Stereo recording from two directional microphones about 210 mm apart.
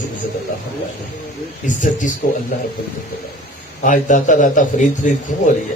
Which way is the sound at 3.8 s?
40° left (ahead or behind).